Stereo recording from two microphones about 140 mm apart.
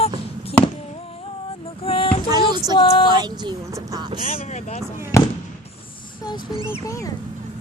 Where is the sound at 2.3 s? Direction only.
30° right (ahead or behind).